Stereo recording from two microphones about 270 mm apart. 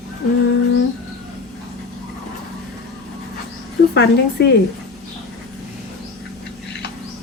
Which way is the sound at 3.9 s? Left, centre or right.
Left.